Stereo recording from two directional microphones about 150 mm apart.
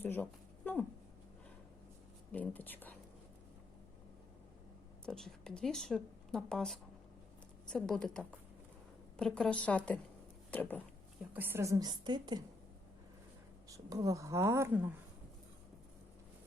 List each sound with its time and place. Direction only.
0.0 s a sound: 15° left (ahead or behind)
2.3 s whispering: 10° left (ahead or behind)
5.0 s a woman's voice: 5° left (ahead or behind)
11.3 s a woman's voice: 15° right (ahead or behind)
13.7 s a woman's voice: 20° right (ahead or behind)